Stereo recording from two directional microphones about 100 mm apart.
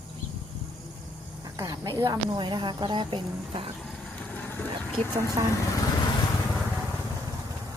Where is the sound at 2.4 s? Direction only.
50° right (ahead or behind).